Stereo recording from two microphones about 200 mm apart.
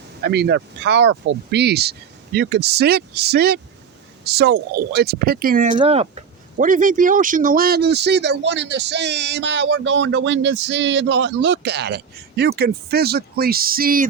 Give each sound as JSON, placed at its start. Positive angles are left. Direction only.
{"t": 0.2, "sound": "speech", "side_deg": -55}
{"t": 5.7, "sound": "speech", "side_deg": -30}
{"t": 6.6, "sound": "speech", "side_deg": -40}